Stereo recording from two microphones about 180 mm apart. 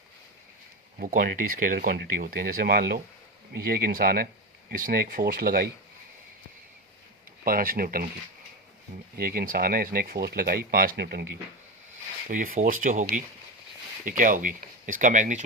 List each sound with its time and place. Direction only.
0.9 s speech: 50° right (ahead or behind)
7.4 s speech: 55° right (ahead or behind)
9.1 s speech: 55° right (ahead or behind)
12.3 s speech: 50° right (ahead or behind)